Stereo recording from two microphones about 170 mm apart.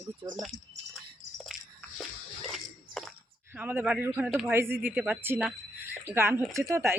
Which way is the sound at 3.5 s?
10° right (ahead or behind).